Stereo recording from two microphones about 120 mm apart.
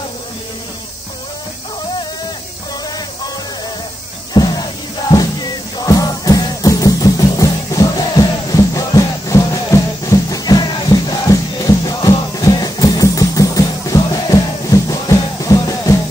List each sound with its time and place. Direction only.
4.3 s music: 35° left (ahead or behind)